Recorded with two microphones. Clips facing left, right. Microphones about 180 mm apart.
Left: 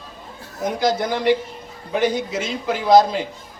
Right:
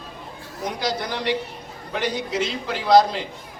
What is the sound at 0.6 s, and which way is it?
A man's voice, 50° left (ahead or behind).